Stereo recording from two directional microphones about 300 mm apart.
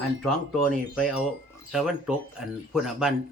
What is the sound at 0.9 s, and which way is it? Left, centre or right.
A man's voice, centre.